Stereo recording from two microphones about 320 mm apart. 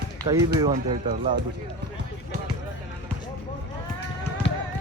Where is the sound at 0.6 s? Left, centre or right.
Centre.